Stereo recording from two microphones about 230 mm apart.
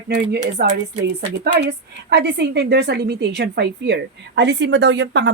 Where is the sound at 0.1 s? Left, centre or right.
Right.